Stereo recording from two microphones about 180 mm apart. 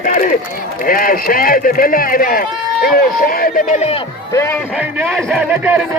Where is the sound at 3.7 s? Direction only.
35° left (ahead or behind).